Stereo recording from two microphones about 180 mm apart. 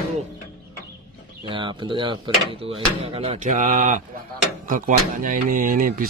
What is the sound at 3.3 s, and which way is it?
Speech, 45° right (ahead or behind).